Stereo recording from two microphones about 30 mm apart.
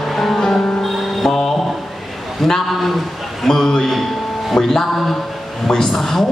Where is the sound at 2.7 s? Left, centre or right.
Centre.